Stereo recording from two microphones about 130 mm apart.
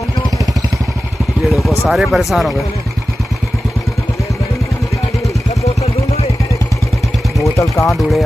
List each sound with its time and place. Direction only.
1.5 s vehicle: centre (ahead or behind)
1.9 s speech: centre (ahead or behind)
7.5 s speech: 25° left (ahead or behind)
7.9 s speech: centre (ahead or behind)